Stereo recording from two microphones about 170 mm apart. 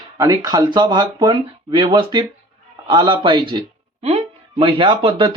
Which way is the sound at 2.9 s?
25° right (ahead or behind).